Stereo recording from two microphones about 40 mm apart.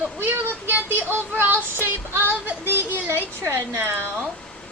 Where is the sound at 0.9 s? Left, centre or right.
Right.